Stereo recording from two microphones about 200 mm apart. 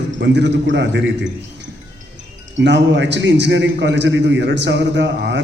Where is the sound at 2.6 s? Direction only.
60° right (ahead or behind).